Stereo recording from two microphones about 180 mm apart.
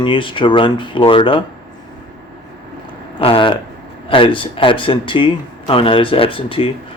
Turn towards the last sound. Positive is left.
turn(degrees=30)  # may be behind; listen again after turning